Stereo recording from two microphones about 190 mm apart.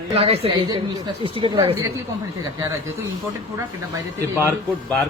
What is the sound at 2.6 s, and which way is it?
Speech, 15° right (ahead or behind).